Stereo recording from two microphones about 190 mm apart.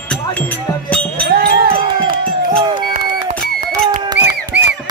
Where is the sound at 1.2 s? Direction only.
55° right (ahead or behind).